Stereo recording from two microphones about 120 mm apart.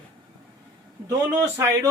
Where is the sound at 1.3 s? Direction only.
25° right (ahead or behind).